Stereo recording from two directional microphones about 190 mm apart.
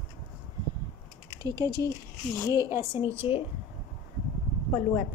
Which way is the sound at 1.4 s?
20° right (ahead or behind).